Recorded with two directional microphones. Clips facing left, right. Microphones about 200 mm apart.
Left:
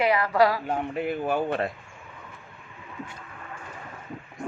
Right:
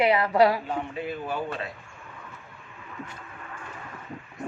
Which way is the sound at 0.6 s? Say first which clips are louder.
Left 3 dB; 55° left (ahead or behind).